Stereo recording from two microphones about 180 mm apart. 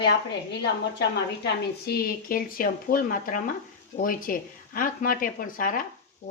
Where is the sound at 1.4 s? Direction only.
60° left (ahead or behind).